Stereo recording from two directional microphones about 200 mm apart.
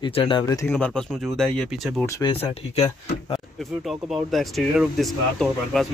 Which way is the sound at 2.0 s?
15° left (ahead or behind).